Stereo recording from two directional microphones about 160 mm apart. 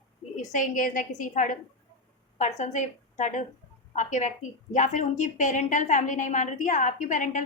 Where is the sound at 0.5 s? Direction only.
55° left (ahead or behind).